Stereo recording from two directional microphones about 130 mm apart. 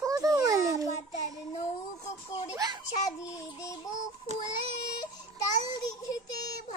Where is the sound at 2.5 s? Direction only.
30° right (ahead or behind).